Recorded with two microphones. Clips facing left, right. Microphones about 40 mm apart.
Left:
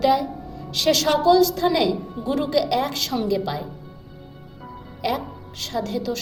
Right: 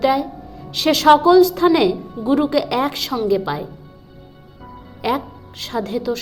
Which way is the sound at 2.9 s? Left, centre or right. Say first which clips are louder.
Right 4 dB; centre.